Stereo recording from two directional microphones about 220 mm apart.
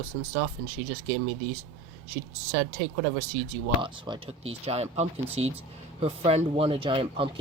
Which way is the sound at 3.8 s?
20° right (ahead or behind).